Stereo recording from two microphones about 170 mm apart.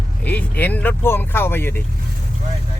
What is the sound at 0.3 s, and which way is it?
Speech, 10° left (ahead or behind).